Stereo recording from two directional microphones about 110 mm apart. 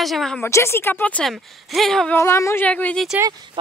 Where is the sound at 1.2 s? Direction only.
Centre (ahead or behind).